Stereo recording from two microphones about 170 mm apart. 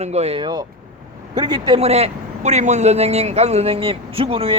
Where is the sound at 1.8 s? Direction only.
40° right (ahead or behind).